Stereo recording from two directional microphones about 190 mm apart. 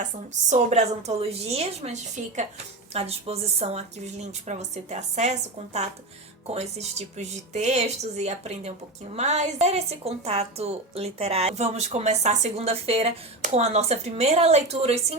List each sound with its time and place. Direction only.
0.5 s a woman's voice: 35° right (ahead or behind)